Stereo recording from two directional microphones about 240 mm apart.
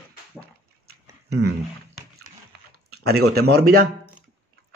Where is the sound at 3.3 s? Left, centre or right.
Right.